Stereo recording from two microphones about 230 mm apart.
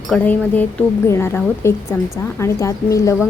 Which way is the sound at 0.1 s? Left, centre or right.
Centre.